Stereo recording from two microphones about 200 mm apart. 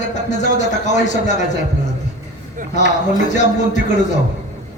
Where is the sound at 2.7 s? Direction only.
35° left (ahead or behind).